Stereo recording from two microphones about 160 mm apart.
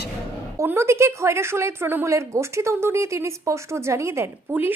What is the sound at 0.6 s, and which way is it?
A woman's voice, 15° right (ahead or behind).